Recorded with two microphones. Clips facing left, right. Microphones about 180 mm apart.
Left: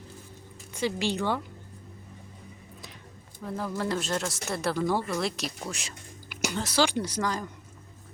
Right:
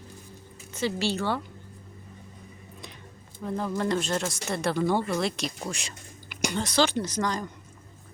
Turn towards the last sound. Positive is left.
turn(degrees=5)  # may be behind; listen again after turning